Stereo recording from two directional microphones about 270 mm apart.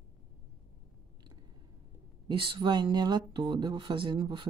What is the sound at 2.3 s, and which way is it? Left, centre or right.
Speech, centre.